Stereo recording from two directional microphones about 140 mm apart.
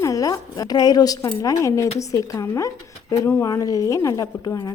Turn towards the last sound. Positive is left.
turn(degrees=30)  # may be behind; listen again after turning